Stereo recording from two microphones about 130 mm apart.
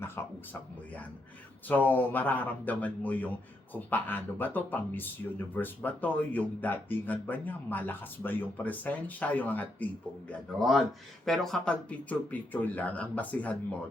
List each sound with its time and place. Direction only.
0.2 s speech: 20° left (ahead or behind)
1.6 s speech: 15° left (ahead or behind)
10.6 s speech: centre (ahead or behind)